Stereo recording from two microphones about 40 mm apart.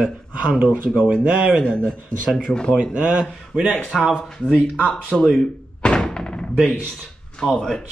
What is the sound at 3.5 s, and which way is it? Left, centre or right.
Speech, centre.